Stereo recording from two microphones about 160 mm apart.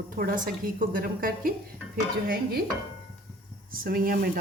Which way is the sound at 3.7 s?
65° right (ahead or behind).